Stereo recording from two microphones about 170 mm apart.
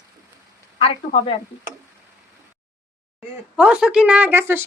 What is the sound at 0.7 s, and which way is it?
Speech, 35° left (ahead or behind).